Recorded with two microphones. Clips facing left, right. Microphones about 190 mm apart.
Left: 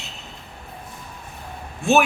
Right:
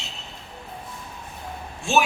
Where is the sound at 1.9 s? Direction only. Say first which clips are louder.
Left 4 dB; 60° left (ahead or behind).